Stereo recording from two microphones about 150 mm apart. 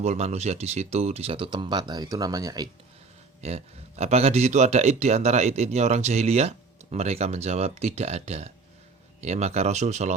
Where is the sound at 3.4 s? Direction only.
45° right (ahead or behind).